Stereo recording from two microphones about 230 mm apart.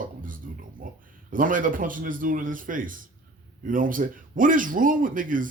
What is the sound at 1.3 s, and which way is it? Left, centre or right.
Speech, right.